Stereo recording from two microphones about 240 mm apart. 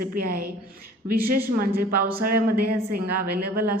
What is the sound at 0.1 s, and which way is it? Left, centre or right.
A woman's voice, right.